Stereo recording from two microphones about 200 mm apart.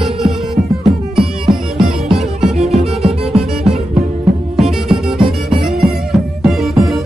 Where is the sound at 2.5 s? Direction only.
30° right (ahead or behind).